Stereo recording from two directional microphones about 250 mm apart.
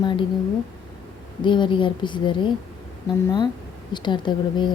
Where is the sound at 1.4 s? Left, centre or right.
Centre.